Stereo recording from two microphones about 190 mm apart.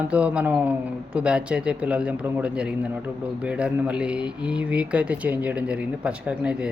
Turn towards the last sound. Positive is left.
turn(degrees=-5)  # may be behind; listen again after turning